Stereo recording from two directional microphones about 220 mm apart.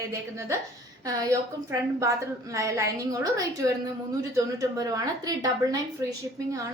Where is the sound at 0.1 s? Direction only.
15° right (ahead or behind).